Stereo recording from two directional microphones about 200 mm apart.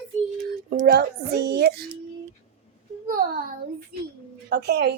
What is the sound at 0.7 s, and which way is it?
Speech, 45° right (ahead or behind).